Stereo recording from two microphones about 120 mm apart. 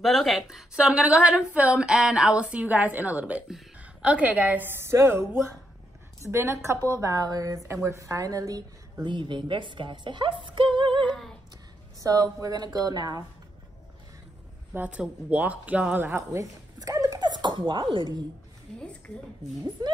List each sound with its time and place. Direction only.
0.0 s a woman's voice: centre (ahead or behind); by 11.1 s 45° right (ahead or behind)
12.0 s a woman's voice: 30° right (ahead or behind)
14.7 s a woman's voice: 10° right (ahead or behind)
16.3 s a sound: 30° right (ahead or behind)
18.8 s a woman's voice: 10° left (ahead or behind)